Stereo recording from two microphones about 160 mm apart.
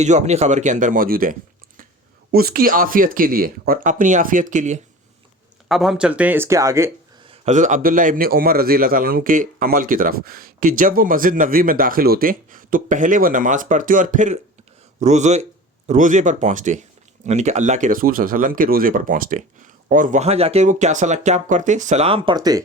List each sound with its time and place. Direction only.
0.0 s speech: 45° right (ahead or behind)
2.3 s a man's voice: 70° right (ahead or behind); by 4.8 s 50° right (ahead or behind)
5.6 s speech: centre (ahead or behind); by 6.9 s 20° right (ahead or behind)
7.3 s a man's voice: 45° right (ahead or behind)
22.4 s speech: 25° right (ahead or behind)